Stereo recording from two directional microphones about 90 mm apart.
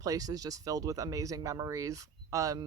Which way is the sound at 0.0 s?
40° right (ahead or behind).